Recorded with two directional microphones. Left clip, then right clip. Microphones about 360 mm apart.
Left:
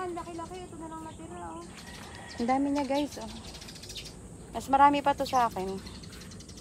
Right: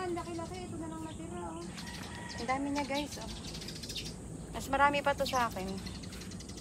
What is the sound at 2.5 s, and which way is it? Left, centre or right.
Speech, centre.